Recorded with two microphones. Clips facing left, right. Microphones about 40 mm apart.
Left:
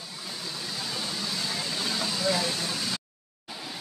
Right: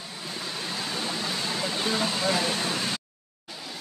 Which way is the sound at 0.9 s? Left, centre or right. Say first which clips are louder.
Right 2 dB; right.